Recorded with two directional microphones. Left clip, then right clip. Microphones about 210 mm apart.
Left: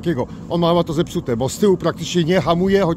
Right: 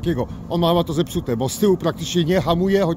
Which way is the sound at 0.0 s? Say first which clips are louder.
Left 2 dB; 5° left (ahead or behind).